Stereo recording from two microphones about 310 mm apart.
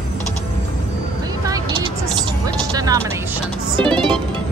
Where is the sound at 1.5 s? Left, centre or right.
Centre.